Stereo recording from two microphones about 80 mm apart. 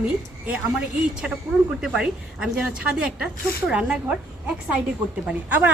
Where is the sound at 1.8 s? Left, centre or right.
Centre.